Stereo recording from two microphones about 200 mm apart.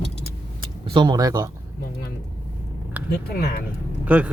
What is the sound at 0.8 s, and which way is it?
Speech, 25° right (ahead or behind).